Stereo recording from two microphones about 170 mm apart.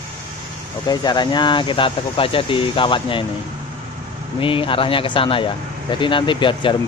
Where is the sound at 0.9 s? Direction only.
25° left (ahead or behind).